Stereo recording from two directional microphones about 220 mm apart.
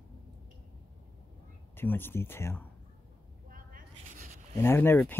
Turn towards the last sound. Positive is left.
turn(degrees=10)  # may be behind; listen again after turning